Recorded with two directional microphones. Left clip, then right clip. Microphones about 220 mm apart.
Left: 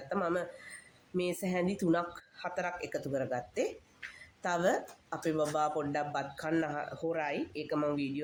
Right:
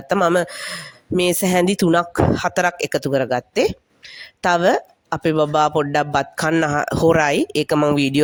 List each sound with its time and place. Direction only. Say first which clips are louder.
0.1 s speech: right 17 dB; 50° right (ahead or behind)